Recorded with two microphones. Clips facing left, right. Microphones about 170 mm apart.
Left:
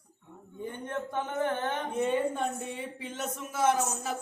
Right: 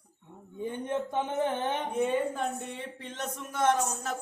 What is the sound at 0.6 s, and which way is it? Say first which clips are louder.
Speech: right 4 dB; 15° right (ahead or behind).